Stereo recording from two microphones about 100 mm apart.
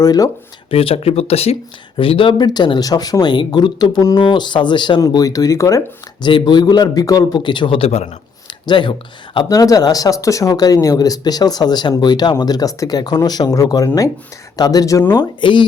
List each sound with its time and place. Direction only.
0.0 s speech: 40° left (ahead or behind)
0.7 s speech: 70° left (ahead or behind); by 1.5 s 90° left
2.0 s speech: 60° left (ahead or behind)
5.0 s speech: 35° left (ahead or behind)
6.2 s speech: 50° left (ahead or behind); by 8.0 s 80° left
8.4 s speech: 55° left (ahead or behind)
9.5 s speech: 35° left (ahead or behind)
15.1 s speech: 50° left (ahead or behind)